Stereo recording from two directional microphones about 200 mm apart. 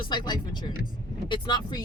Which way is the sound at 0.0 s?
20° left (ahead or behind).